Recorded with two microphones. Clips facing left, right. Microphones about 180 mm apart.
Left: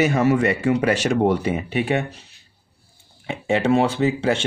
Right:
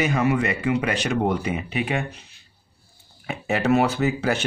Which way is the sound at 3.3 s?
30° left (ahead or behind).